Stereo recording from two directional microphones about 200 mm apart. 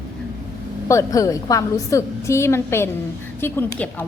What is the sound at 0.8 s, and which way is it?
A woman's voice, 15° left (ahead or behind).